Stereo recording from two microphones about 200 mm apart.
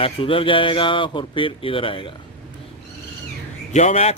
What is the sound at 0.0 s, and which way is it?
Speech, 25° left (ahead or behind).